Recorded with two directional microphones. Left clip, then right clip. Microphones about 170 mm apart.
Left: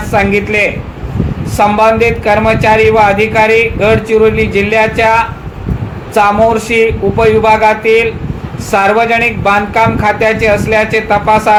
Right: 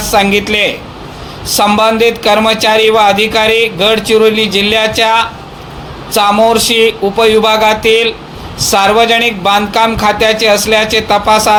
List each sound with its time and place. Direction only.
0.1 s speech: 50° right (ahead or behind)